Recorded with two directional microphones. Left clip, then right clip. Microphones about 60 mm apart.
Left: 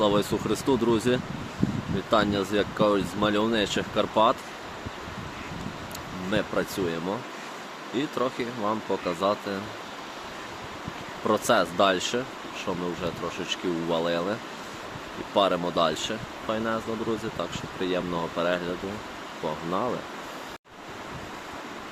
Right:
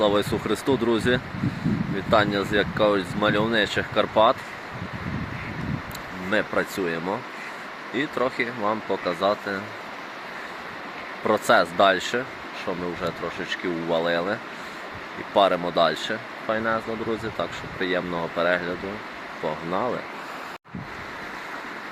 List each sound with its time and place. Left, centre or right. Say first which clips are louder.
0.0 s speech: right 2 dB; left
6.5 s speech: right 3 dB; centre
9.0 s speech: right 3 dB; left
11.3 s speech: right 4 dB; left
13.9 s speech: right 4 dB; left
15.4 s speech: right 4 dB; centre
15.8 s speech: right 5 dB; left
19.5 s speech: right 2 dB; centre